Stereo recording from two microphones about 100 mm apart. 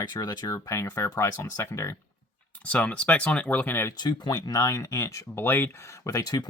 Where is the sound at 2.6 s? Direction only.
15° left (ahead or behind).